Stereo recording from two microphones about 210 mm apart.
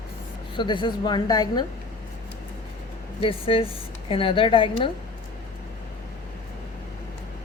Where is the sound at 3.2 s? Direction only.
25° left (ahead or behind).